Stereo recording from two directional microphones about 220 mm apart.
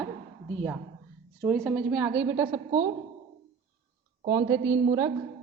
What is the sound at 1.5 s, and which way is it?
A woman's voice, centre (ahead or behind).